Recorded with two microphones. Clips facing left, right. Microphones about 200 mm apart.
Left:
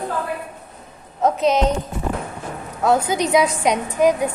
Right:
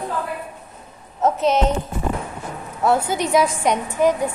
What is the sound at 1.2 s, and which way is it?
Speech, 15° left (ahead or behind).